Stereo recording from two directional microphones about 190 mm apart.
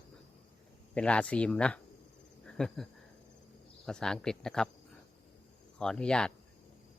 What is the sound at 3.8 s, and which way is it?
Speech, 5° left (ahead or behind).